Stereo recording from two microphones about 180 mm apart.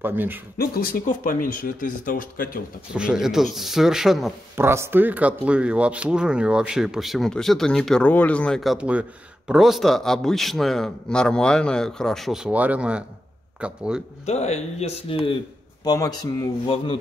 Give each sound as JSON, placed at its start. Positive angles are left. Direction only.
{"t": 0.0, "sound": "speech", "side_deg": -10}
{"t": 0.6, "sound": "speech", "side_deg": 55}
{"t": 2.9, "sound": "speech", "side_deg": -5}
{"t": 4.6, "sound": "speech", "side_deg": -15}
{"t": 14.2, "sound": "speech", "side_deg": 40}
{"t": 15.8, "sound": "speech", "side_deg": 20}